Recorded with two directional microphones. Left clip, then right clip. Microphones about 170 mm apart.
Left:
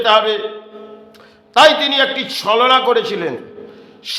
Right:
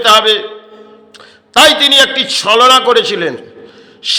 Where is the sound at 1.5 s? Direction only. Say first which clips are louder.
Right 4 dB; 15° right (ahead or behind).